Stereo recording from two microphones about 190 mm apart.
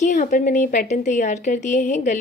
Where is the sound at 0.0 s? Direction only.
40° left (ahead or behind).